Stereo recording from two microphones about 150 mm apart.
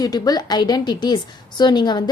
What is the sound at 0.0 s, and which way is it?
A woman's voice, 25° left (ahead or behind).